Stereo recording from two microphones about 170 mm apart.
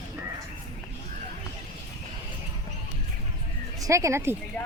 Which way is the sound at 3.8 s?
15° right (ahead or behind).